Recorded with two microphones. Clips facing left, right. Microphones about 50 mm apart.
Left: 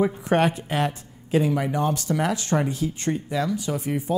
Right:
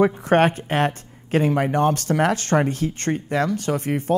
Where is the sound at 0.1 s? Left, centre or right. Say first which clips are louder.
Right 4 dB; right.